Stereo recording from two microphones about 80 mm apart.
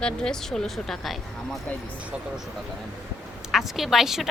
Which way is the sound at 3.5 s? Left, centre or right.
Centre.